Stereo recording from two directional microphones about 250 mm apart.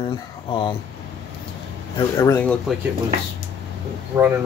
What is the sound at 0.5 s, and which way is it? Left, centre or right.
Speech, centre.